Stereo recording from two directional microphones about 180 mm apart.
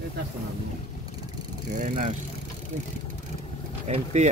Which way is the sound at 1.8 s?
45° right (ahead or behind).